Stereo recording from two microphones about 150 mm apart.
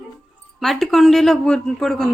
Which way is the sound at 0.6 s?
Centre (ahead or behind).